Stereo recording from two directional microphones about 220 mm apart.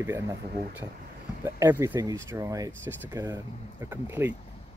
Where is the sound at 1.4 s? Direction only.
10° right (ahead or behind).